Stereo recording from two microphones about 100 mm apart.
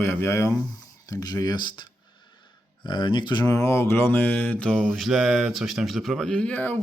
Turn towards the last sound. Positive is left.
turn(degrees=15)  # may be behind; listen again after turning